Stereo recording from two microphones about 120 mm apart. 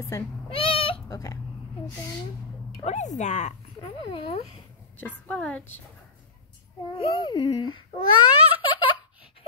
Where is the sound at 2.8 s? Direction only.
70° left (ahead or behind).